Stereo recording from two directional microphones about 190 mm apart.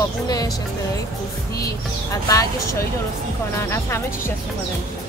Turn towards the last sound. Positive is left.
turn(degrees=15)  # may be behind; listen again after turning